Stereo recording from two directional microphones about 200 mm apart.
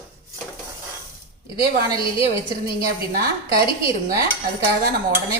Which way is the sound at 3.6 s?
50° right (ahead or behind).